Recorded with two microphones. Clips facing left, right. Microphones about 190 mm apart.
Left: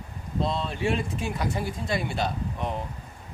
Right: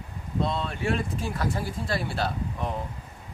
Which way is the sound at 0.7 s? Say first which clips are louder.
Left 1 dB; 25° left (ahead or behind).